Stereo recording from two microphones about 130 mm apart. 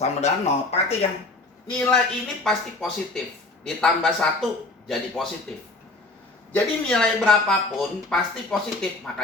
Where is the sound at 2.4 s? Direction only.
5° left (ahead or behind).